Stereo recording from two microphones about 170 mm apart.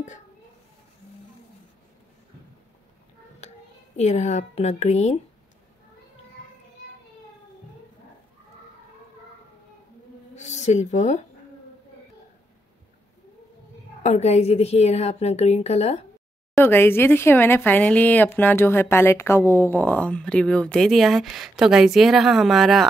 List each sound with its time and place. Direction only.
3.3 s speech: 40° left (ahead or behind)
10.3 s speech: 40° left (ahead or behind)
14.0 s a woman's voice: 40° left (ahead or behind)
16.5 s speech: 15° left (ahead or behind)